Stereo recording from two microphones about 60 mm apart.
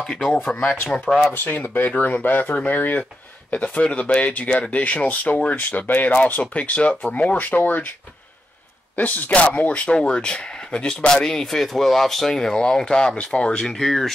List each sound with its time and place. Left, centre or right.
0.6 s speech: left
1.0 s speech: centre
1.3 s speech: left
1.9 s speech: left
8.9 s speech: left; by 14.1 s centre